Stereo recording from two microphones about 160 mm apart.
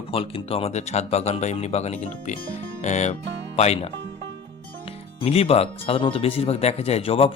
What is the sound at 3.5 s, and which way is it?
Speech, 40° left (ahead or behind).